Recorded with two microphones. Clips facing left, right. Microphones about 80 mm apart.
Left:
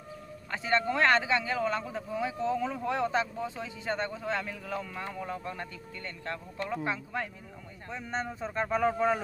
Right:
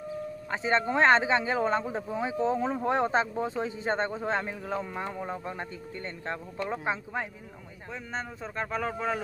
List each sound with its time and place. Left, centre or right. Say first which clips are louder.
0.5 s speech: right 1 dB; right
7.9 s speech: left 2 dB; centre